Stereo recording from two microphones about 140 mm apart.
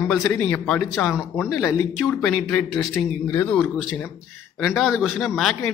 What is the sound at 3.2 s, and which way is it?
Speech, 20° left (ahead or behind).